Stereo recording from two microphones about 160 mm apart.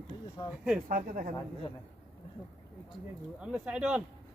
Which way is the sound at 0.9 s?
60° right (ahead or behind).